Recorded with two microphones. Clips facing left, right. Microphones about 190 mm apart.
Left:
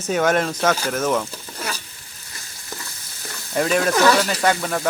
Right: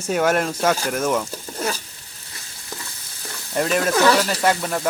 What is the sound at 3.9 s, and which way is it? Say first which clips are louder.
Speech: even; 15° right (ahead or behind).